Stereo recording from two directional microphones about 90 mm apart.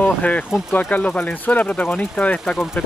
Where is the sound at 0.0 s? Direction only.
15° left (ahead or behind).